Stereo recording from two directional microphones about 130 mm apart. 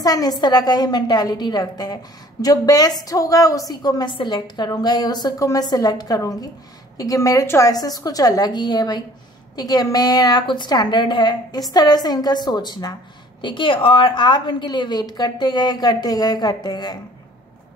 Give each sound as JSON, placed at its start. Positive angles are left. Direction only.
{"t": 0.0, "sound": "a woman's voice", "side_deg": 30}